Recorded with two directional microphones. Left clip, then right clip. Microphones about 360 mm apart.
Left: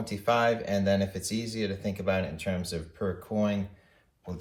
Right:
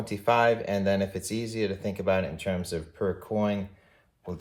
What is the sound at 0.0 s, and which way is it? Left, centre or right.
Speech, right.